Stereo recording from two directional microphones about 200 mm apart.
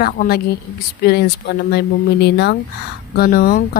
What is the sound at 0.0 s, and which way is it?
Speech, 50° left (ahead or behind).